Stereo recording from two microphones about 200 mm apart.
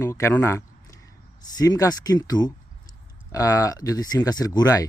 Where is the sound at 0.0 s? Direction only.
15° left (ahead or behind).